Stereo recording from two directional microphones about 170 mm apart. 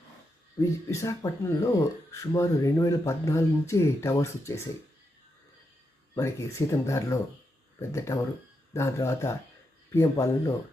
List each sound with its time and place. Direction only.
0.6 s speech: 15° left (ahead or behind)
6.1 s speech: 15° left (ahead or behind)